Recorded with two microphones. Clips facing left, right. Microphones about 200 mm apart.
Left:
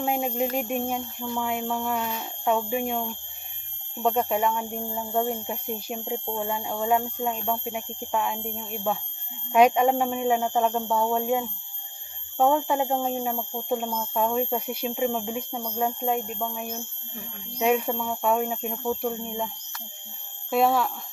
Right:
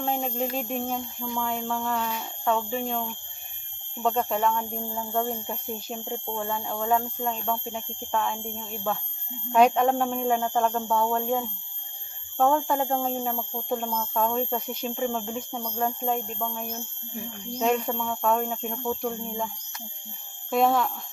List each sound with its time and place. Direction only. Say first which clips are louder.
0.0 s speech: left 2 dB; 10° left (ahead or behind)
20.5 s speech: even; 5° left (ahead or behind)